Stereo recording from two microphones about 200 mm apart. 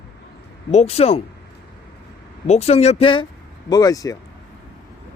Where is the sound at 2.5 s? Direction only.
30° left (ahead or behind).